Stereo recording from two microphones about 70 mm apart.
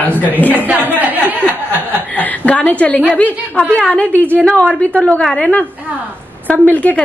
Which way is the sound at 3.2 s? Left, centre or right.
Left.